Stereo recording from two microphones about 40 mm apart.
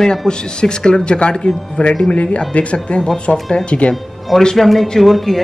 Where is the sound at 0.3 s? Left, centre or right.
Left.